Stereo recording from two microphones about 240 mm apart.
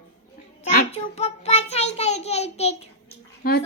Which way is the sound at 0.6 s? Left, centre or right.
Left.